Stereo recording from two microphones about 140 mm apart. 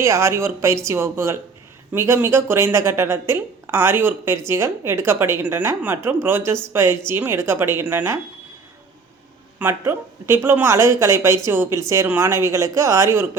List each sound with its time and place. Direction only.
0.0 s speech: 20° right (ahead or behind)
9.6 s speech: 15° right (ahead or behind)